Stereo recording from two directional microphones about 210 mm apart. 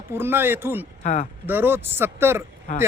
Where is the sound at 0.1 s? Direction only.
10° right (ahead or behind).